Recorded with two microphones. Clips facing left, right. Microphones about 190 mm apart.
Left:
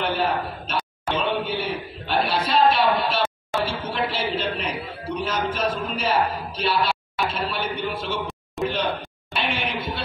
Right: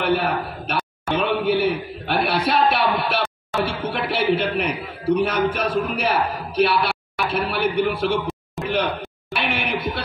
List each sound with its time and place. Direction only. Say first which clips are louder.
0.0 s a sound: right 3 dB; 60° right (ahead or behind)
5.2 s a man's voice: right 4 dB; 60° right (ahead or behind)
8.6 s speech: left 4 dB; centre (ahead or behind)
9.3 s a man's voice: right 2 dB; 65° right (ahead or behind)